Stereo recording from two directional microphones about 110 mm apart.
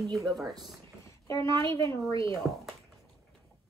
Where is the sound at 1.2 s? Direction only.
25° left (ahead or behind).